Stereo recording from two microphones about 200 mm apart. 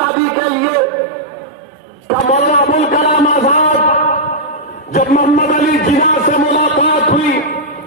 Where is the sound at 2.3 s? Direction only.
35° left (ahead or behind).